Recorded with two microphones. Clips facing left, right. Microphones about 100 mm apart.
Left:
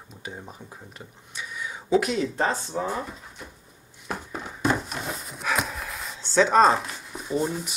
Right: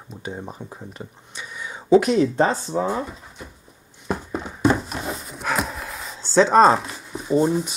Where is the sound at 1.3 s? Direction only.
25° right (ahead or behind).